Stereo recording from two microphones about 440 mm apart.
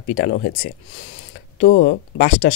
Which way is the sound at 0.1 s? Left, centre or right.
Centre.